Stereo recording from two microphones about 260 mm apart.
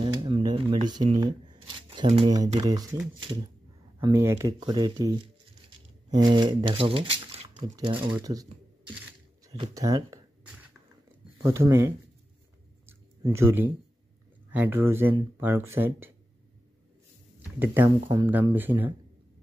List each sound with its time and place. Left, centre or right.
0.0 s a sound: right
1.2 s speech: centre
9.5 s speech: centre
11.4 s speech: centre
12.8 s a sound: centre
14.5 s speech: centre
17.6 s speech: centre